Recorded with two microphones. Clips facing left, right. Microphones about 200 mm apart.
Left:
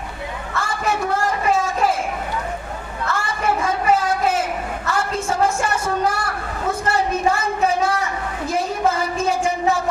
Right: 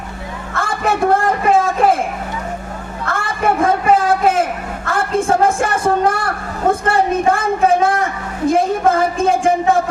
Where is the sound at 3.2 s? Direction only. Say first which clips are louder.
Right 7 dB; 55° right (ahead or behind).